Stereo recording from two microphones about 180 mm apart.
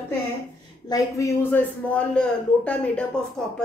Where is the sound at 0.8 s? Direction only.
20° left (ahead or behind).